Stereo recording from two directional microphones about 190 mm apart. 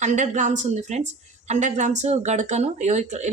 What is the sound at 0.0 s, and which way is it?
A woman's voice, 40° right (ahead or behind).